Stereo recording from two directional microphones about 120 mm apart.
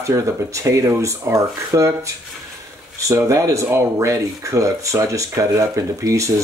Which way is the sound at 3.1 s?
25° right (ahead or behind).